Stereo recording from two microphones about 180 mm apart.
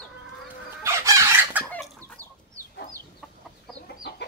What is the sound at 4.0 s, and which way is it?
Chicken, 65° left (ahead or behind).